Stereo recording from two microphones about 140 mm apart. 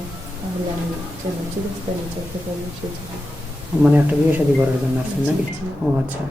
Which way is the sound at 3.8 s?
10° right (ahead or behind).